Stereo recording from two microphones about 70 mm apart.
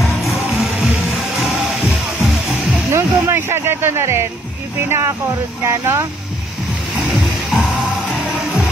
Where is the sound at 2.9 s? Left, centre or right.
Right.